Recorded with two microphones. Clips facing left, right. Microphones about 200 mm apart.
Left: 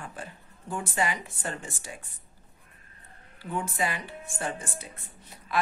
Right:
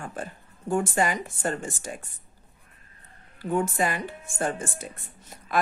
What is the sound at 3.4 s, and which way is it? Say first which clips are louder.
Speech: right 6 dB; 45° right (ahead or behind).